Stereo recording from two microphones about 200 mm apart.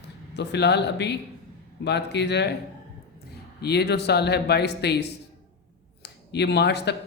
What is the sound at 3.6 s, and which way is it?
Speech, 55° left (ahead or behind).